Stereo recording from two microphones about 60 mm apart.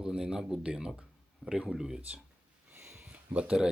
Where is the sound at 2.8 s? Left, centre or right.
Right.